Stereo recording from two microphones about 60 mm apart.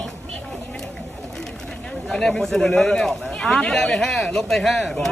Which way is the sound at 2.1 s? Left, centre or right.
Centre.